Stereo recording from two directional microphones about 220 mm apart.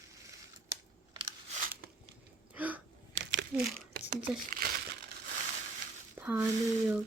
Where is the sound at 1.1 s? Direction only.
20° right (ahead or behind).